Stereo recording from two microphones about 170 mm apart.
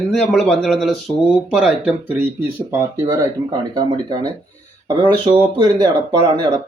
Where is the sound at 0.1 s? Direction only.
Centre (ahead or behind).